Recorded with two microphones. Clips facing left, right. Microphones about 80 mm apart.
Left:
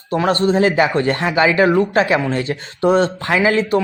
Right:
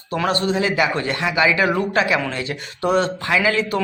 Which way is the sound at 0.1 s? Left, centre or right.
Left.